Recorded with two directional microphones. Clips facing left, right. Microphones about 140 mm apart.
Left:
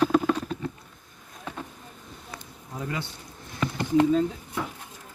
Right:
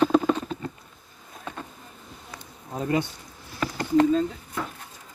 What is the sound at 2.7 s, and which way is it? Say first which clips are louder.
Speech: right 8 dB; 30° right (ahead or behind).